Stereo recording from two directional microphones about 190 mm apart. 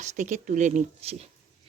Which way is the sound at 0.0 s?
40° right (ahead or behind).